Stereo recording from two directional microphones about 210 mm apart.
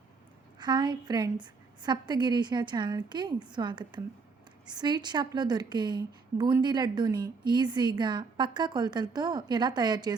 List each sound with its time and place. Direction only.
0.6 s a woman's voice: 20° right (ahead or behind)